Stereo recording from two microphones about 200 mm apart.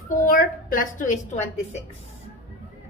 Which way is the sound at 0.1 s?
45° left (ahead or behind).